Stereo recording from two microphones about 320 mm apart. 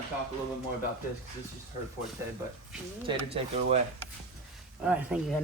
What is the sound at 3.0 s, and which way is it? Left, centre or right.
Speech, centre.